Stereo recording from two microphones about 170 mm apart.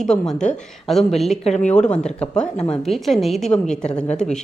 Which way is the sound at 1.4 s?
40° left (ahead or behind).